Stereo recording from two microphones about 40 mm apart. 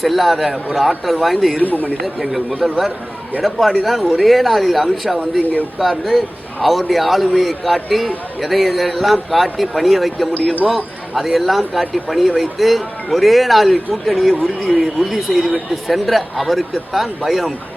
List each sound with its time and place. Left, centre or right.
0.0 s a man's voice: centre
1.6 s speech: left
2.0 s a man's voice: centre